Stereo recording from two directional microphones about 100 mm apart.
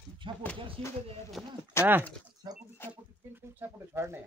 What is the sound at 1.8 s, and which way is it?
Speech, 25° left (ahead or behind).